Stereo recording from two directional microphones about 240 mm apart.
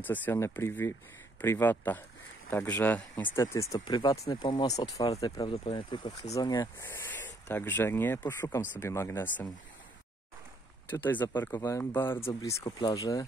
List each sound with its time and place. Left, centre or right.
0.0 s speech: centre
11.1 s speech: centre